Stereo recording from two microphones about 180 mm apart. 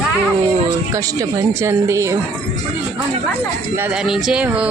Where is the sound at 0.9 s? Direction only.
15° right (ahead or behind).